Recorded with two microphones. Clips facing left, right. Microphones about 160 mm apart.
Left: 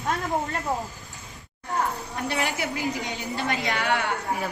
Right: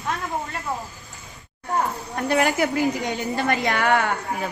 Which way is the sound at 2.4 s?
45° right (ahead or behind).